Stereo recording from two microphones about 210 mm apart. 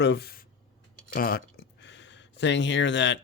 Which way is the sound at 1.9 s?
55° left (ahead or behind).